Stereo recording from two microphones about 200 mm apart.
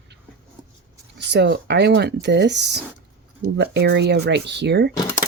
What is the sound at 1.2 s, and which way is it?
Speech, 60° right (ahead or behind).